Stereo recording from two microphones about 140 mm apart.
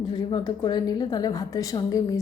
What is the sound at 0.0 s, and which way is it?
A woman's voice, 30° left (ahead or behind).